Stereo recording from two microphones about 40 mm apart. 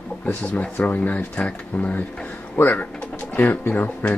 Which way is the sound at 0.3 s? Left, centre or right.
Left.